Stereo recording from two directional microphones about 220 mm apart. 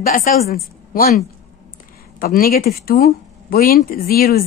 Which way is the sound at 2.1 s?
40° left (ahead or behind).